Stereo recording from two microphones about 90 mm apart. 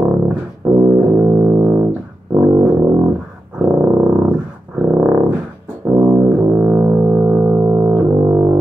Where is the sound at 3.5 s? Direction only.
25° right (ahead or behind).